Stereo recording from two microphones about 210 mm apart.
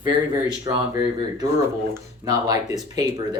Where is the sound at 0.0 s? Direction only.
20° right (ahead or behind).